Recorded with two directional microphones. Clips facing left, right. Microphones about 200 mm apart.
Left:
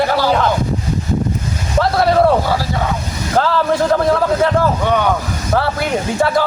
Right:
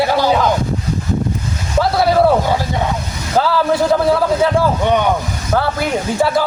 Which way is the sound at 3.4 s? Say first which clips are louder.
Right 1 dB; 5° right (ahead or behind).